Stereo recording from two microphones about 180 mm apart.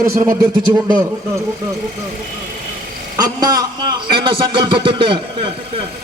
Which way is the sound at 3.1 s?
20° right (ahead or behind).